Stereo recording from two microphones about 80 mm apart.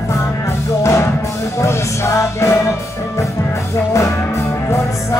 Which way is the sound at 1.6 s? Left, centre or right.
Left.